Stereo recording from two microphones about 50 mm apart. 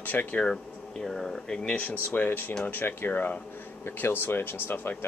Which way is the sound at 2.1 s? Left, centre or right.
Left.